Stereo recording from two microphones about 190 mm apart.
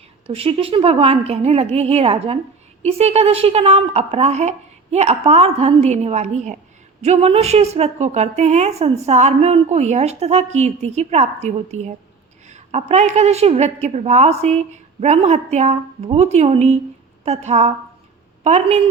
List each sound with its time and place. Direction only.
0.3 s a woman's voice: 30° right (ahead or behind)